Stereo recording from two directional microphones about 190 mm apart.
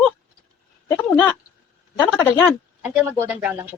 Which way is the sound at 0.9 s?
10° left (ahead or behind).